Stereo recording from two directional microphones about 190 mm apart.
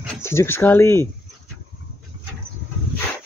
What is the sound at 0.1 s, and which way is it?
Speech, 15° left (ahead or behind).